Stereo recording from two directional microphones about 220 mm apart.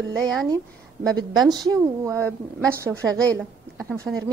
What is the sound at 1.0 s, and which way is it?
A woman's voice, 20° right (ahead or behind).